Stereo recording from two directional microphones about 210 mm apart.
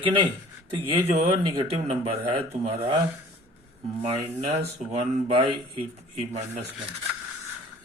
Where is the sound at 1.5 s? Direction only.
20° right (ahead or behind).